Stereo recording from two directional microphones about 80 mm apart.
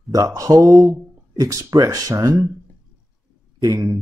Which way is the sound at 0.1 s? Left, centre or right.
Right.